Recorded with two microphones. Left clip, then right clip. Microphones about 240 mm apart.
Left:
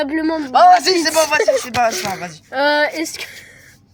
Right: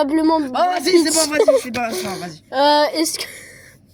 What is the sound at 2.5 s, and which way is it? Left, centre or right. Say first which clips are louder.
Speech: right 1 dB; right.